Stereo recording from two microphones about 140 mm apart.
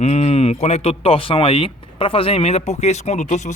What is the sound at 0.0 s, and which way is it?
A man's voice, 45° left (ahead or behind).